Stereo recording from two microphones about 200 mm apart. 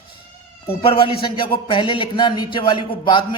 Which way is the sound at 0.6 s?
30° left (ahead or behind).